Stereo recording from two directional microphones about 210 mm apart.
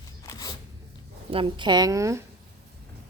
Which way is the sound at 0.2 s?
15° left (ahead or behind).